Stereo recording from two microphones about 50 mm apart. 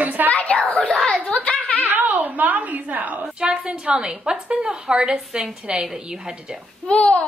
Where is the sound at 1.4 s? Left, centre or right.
Left.